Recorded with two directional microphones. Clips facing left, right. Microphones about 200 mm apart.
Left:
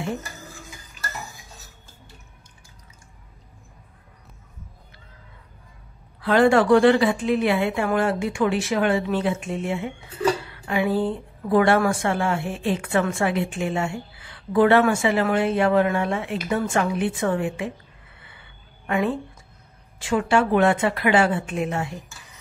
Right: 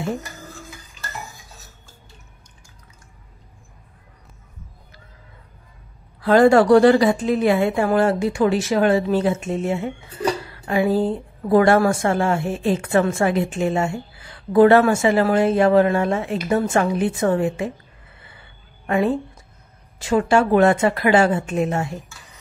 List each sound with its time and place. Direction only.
6.2 s a woman's voice: 40° right (ahead or behind)
18.9 s a woman's voice: 35° right (ahead or behind)